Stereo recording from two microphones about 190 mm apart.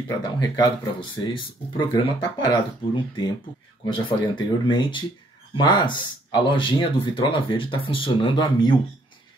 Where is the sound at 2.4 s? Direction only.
25° left (ahead or behind).